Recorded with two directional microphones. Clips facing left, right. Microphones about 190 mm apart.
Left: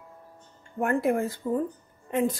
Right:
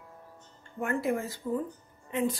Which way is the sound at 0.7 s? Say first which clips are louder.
Left 5 dB; 55° left (ahead or behind).